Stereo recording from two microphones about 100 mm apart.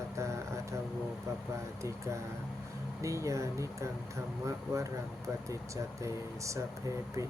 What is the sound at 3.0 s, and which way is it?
Speech, 30° right (ahead or behind).